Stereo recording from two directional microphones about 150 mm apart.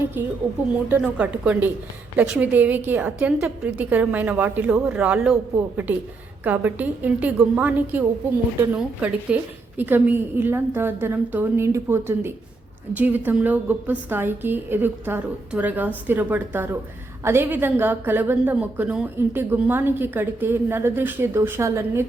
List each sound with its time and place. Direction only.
1.0 s a woman's voice: 10° right (ahead or behind)